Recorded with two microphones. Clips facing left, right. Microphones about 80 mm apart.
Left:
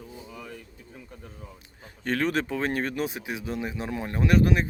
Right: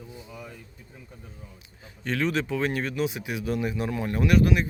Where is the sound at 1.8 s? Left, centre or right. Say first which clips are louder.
Left 1 dB; left.